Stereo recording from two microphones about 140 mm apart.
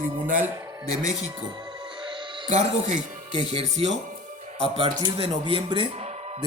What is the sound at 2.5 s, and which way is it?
Speech, 55° right (ahead or behind).